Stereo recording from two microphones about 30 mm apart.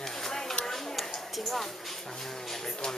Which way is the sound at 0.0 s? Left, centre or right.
Centre.